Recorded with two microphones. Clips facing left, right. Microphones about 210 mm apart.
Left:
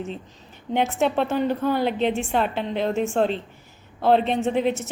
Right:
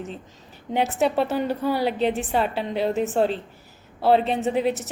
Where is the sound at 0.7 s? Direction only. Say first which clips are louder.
Even; 5° right (ahead or behind).